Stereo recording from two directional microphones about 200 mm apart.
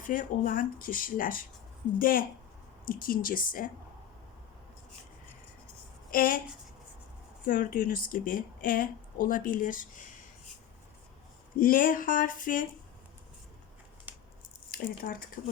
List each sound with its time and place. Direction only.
0.1 s speech: 40° left (ahead or behind)
6.1 s speech: 45° left (ahead or behind)
7.4 s speech: 45° left (ahead or behind)
11.5 s speech: 45° left (ahead or behind)
14.7 s speech: 45° left (ahead or behind)